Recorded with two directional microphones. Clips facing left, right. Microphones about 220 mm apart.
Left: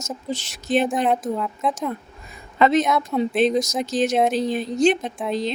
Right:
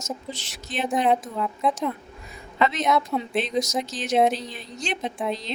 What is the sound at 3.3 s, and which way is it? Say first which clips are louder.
Speech: left 5 dB; 45° left (ahead or behind).